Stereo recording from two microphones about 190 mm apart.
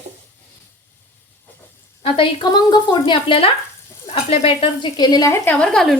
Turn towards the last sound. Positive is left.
turn(degrees=5)  # may be behind; listen again after turning